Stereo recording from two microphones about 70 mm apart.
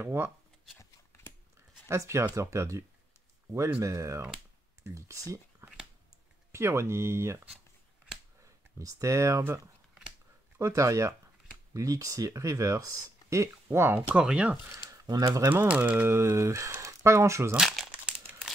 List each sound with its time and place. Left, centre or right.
0.0 s speech: right
0.7 s a sound: left
1.9 s speech: right
3.8 s speech: right
8.7 s speech: right
10.6 s speech: right
13.7 s speech: right
13.9 s speech: centre
14.7 s a sound: right
15.0 s speech: right
15.5 s speech: right
17.6 s crumpling: centre